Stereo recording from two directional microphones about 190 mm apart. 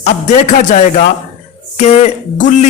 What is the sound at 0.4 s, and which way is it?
A man's voice, 40° left (ahead or behind).